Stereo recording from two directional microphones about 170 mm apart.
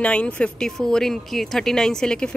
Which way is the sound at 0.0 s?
5° left (ahead or behind).